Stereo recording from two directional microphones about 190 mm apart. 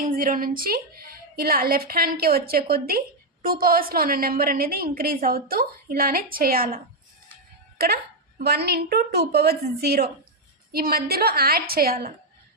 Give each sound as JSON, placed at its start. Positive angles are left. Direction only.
{"t": 0.0, "sound": "a woman's voice", "side_deg": -50}